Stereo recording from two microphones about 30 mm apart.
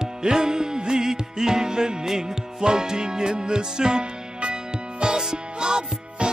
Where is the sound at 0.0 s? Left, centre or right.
Centre.